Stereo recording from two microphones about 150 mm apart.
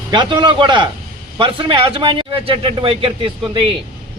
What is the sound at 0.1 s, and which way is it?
A man's voice, 30° right (ahead or behind).